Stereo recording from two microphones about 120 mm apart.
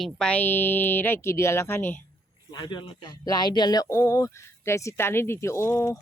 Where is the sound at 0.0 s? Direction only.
5° left (ahead or behind).